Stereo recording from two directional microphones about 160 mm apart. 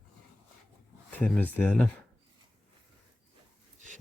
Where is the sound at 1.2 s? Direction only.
10° left (ahead or behind).